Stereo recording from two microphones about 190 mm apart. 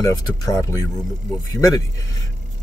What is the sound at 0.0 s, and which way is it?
Speech, 20° left (ahead or behind).